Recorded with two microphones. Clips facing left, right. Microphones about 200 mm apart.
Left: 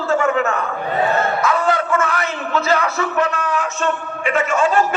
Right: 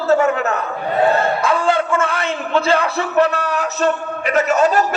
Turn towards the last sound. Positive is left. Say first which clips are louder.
# right 2 dB
turn(degrees=-40)  # may be behind; listen again after turning